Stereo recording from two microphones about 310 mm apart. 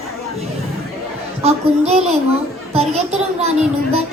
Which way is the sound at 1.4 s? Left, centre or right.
Centre.